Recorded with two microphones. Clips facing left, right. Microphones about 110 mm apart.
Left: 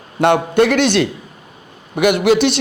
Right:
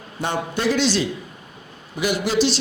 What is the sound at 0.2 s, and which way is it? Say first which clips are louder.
A man's voice: left 11 dB; 65° left (ahead or behind).